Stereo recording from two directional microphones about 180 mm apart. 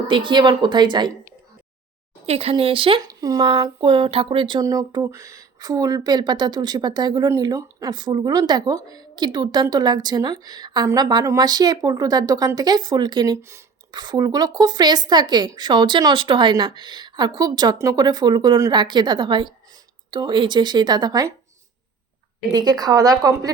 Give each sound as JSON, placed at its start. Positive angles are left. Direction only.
{"t": 0.1, "sound": "a woman's voice", "side_deg": -25}
{"t": 2.2, "sound": "a woman's voice", "side_deg": -35}
{"t": 22.5, "sound": "a woman's voice", "side_deg": -20}